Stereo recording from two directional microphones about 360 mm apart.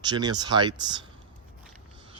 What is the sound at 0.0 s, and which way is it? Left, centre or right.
Speech, centre.